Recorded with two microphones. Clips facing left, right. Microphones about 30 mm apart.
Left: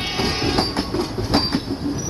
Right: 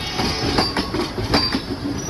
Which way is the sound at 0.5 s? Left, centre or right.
Right.